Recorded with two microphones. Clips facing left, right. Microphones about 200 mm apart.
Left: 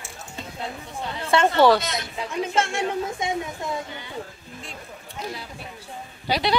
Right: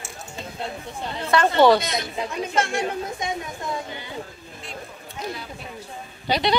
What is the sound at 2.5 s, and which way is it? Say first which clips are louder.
Speech: right 1 dB; 25° left (ahead or behind).